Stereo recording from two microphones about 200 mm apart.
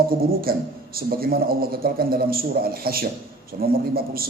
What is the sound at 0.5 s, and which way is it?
A man's voice, 50° right (ahead or behind).